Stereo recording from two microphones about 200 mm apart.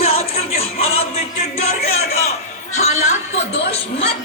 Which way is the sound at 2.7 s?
35° left (ahead or behind).